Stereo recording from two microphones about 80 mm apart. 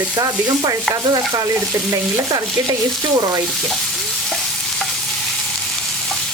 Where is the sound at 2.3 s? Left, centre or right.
Right.